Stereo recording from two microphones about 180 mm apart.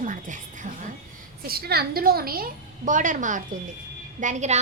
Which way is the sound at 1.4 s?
60° right (ahead or behind).